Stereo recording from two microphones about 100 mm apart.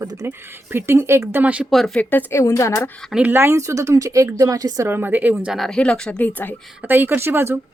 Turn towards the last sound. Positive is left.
turn(degrees=-25)  # may be behind; listen again after turning